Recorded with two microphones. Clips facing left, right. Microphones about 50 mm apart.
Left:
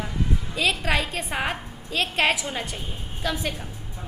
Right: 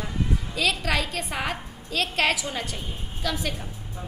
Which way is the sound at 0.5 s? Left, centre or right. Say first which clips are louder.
Left 2 dB; centre.